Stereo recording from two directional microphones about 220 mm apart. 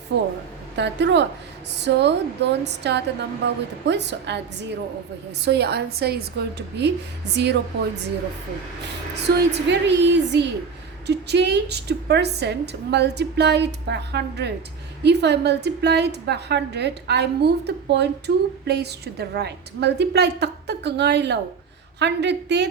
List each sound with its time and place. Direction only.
0.8 s a woman's voice: 50° right (ahead or behind)
5.5 s a woman's voice: 50° right (ahead or behind)
9.2 s a woman's voice: 50° right (ahead or behind)